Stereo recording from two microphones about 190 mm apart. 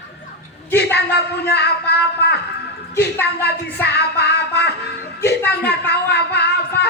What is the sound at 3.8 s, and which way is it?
Music, 60° left (ahead or behind).